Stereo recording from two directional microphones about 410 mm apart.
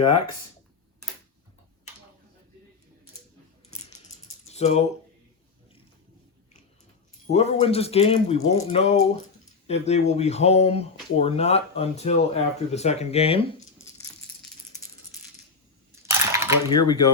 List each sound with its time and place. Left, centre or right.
4.4 s a sound: centre
7.3 s speech: centre
16.0 s cutlery: centre
16.6 s speech: centre